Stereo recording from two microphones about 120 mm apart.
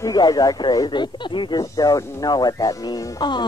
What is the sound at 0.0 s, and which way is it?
Speech, 30° left (ahead or behind).